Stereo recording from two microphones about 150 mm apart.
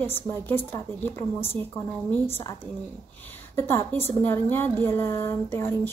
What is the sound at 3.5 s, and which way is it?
A woman's voice, 15° left (ahead or behind).